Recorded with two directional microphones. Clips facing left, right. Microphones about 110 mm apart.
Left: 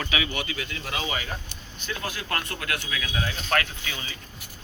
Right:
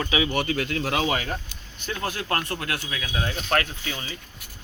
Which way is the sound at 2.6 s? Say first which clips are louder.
Right 1 dB; 30° right (ahead or behind).